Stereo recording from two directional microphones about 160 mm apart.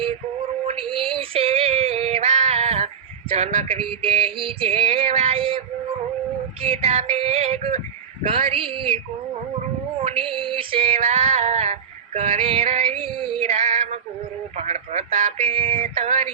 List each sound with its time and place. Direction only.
0.6 s female singing: 35° right (ahead or behind)
10.0 s female singing: 35° right (ahead or behind)
15.4 s female singing: 35° right (ahead or behind)